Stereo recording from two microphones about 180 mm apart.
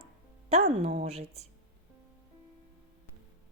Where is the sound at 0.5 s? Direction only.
35° right (ahead or behind).